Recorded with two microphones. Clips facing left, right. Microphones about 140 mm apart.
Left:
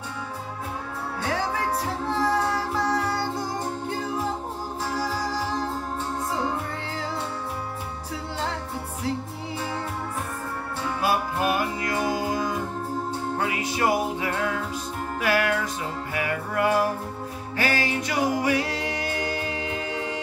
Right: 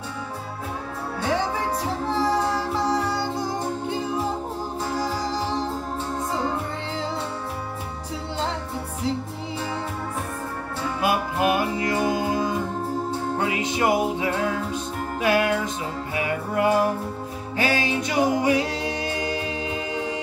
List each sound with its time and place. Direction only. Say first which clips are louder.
1.2 s music: right 2 dB; 20° right (ahead or behind)
4.9 s music: right 1 dB; 25° right (ahead or behind)
11.0 s music: right 2 dB; 20° right (ahead or behind)